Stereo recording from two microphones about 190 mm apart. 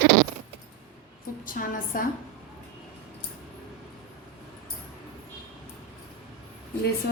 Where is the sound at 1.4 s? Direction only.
45° left (ahead or behind).